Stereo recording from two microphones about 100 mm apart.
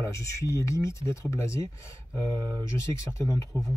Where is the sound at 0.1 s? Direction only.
30° left (ahead or behind).